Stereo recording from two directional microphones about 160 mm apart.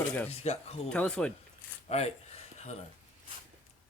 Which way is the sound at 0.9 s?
5° left (ahead or behind).